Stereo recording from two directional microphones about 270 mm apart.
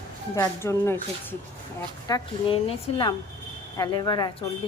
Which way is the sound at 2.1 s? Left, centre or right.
Centre.